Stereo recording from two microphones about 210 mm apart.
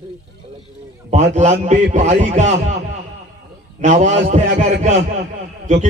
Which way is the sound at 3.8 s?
35° right (ahead or behind).